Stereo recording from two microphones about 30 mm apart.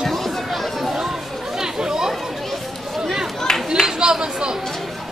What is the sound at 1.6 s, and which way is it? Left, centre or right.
Chatter, right.